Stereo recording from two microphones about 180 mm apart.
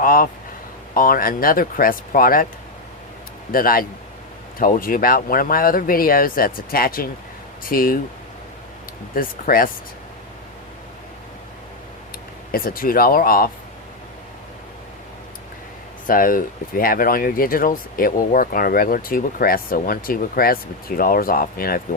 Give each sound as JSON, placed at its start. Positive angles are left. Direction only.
{"t": 0.0, "sound": "speech", "side_deg": 50}
{"t": 3.5, "sound": "speech", "side_deg": 55}
{"t": 9.1, "sound": "speech", "side_deg": 55}
{"t": 12.5, "sound": "speech", "side_deg": 55}
{"t": 16.0, "sound": "speech", "side_deg": 50}